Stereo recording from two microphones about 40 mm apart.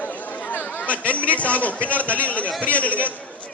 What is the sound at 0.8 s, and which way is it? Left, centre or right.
Speech, left.